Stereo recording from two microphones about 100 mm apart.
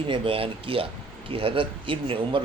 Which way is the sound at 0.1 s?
65° right (ahead or behind).